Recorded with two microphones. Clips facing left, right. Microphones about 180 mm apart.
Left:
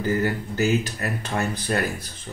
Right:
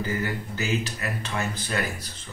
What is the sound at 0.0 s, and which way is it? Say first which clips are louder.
Speech: left 5 dB; 40° left (ahead or behind).